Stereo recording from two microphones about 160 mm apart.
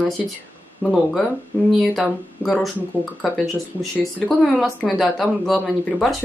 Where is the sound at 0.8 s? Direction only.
10° right (ahead or behind).